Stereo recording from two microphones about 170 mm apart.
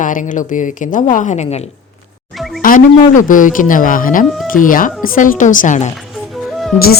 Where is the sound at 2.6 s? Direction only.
50° left (ahead or behind).